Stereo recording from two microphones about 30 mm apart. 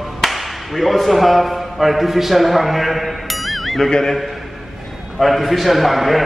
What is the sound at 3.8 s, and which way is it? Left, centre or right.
Speech, left.